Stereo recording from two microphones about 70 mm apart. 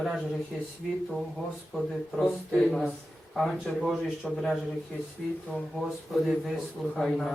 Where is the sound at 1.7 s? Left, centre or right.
Centre.